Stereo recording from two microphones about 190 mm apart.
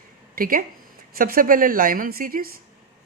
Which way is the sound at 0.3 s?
50° right (ahead or behind).